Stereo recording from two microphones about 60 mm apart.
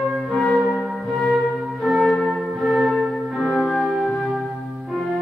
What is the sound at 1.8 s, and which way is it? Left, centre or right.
Music, centre.